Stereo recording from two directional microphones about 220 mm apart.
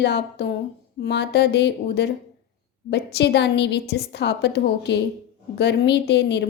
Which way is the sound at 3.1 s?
50° left (ahead or behind).